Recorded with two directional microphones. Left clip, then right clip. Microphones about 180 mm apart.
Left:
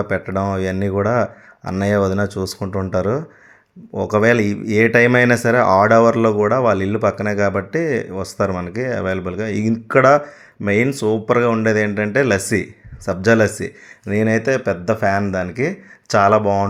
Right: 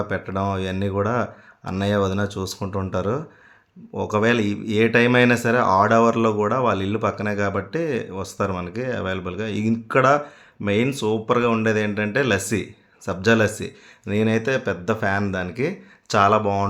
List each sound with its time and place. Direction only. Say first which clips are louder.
0.0 s speech: left 4 dB; 20° left (ahead or behind)